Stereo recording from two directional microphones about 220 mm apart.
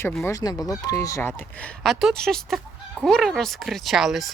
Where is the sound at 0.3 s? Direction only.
15° left (ahead or behind).